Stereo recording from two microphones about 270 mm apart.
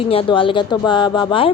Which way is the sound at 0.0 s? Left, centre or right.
Centre.